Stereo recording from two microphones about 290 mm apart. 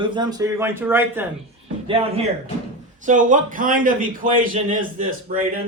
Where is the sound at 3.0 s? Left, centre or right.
Right.